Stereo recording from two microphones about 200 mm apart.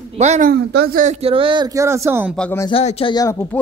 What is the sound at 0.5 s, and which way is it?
Speech, 50° right (ahead or behind).